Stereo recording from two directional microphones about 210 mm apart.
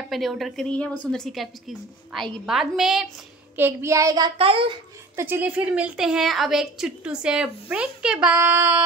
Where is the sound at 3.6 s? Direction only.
10° right (ahead or behind).